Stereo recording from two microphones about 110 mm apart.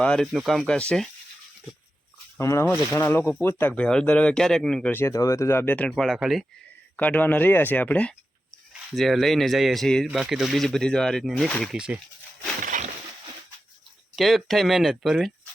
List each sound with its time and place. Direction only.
0.0 s speech: 5° left (ahead or behind)
2.4 s speech: 25° left (ahead or behind); by 4.9 s 5° left (ahead or behind)
4.9 s speech: 20° left (ahead or behind)
5.9 s speech: centre (ahead or behind)
6.9 s speech: 15° left (ahead or behind)
9.0 s speech: centre (ahead or behind)
14.2 s speech: centre (ahead or behind)